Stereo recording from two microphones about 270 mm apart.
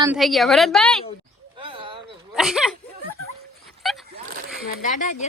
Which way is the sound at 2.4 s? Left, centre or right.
Centre.